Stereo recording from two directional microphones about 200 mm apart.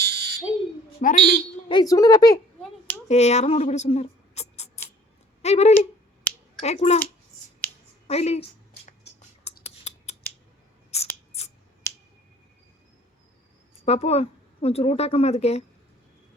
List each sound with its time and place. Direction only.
0.0 s fire alarm: 55° right (ahead or behind)
1.0 s a woman's voice: 30° left (ahead or behind)
3.1 s a woman's voice: 35° left (ahead or behind)
8.0 s a woman's voice: 30° left (ahead or behind)
8.4 s a sound: 55° left (ahead or behind)
9.6 s scissors: 35° left (ahead or behind)
13.8 s a woman's voice: 30° left (ahead or behind)